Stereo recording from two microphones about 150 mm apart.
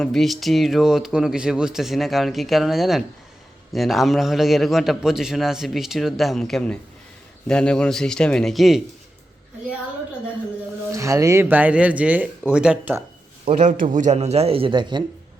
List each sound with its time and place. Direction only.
0.0 s a man's voice: centre (ahead or behind)
10.9 s speech: 20° right (ahead or behind)
13.4 s a man's voice: 55° right (ahead or behind); by 15.0 s 30° right (ahead or behind)